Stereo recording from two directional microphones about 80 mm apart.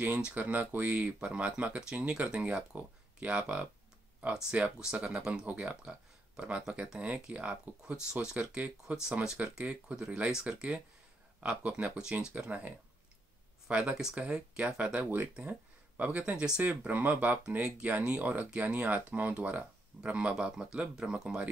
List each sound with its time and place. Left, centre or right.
0.0 s speech: centre